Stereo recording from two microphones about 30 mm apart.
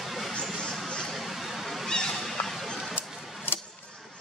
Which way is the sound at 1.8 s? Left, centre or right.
Left.